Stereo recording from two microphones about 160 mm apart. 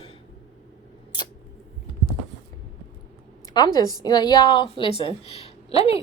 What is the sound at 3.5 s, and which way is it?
A woman's voice, 25° left (ahead or behind).